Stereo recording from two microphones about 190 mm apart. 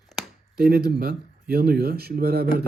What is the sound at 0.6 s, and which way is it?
Speech, 55° right (ahead or behind).